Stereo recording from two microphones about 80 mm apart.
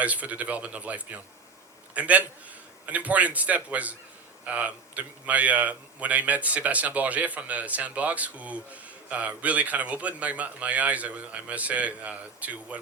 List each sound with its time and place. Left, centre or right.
0.0 s a man's voice: centre